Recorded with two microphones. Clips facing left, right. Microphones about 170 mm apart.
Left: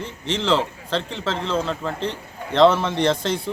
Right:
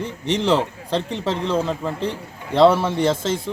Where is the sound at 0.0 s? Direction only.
15° right (ahead or behind).